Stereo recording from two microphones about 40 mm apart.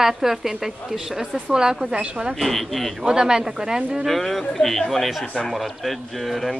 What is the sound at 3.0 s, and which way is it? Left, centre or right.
Speech, centre.